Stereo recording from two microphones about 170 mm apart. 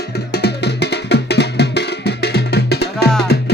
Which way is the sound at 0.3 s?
75° left (ahead or behind).